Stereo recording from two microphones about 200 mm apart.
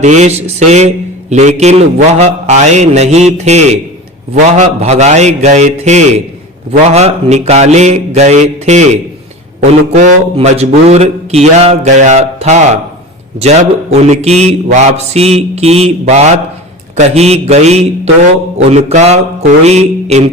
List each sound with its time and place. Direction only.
0.0 s mantra: 35° right (ahead or behind)